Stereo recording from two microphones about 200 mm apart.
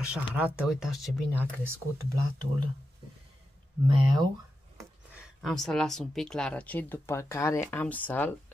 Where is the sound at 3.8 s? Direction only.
25° right (ahead or behind).